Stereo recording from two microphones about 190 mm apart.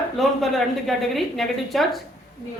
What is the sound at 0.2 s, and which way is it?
A man's voice, centre (ahead or behind).